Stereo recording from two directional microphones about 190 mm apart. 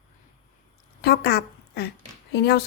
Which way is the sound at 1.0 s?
60° left (ahead or behind).